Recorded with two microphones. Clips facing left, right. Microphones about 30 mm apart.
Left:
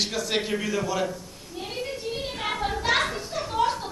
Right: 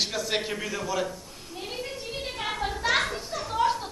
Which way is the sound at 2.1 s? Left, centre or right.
Centre.